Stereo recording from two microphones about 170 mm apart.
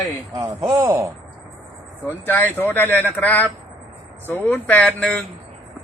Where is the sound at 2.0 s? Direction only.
10° left (ahead or behind).